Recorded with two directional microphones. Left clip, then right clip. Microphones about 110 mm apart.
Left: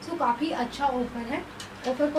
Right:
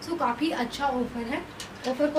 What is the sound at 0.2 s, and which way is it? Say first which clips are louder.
Speech: left 2 dB; 10° right (ahead or behind).